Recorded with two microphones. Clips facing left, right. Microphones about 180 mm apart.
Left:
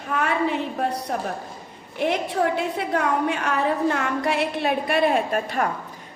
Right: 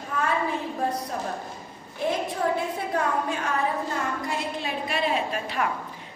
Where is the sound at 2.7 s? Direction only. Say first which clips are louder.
Left 3 dB; 70° left (ahead or behind).